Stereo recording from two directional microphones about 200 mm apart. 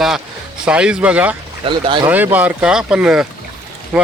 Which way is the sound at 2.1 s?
10° right (ahead or behind).